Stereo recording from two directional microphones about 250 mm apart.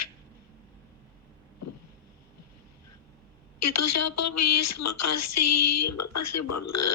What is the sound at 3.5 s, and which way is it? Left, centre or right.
A woman's voice, left.